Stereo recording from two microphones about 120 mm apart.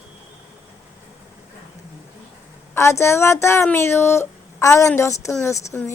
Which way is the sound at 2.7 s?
25° left (ahead or behind).